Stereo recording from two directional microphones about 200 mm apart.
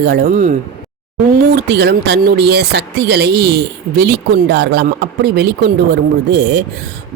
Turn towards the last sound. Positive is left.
turn(degrees=-55)  # may be behind; listen again after turning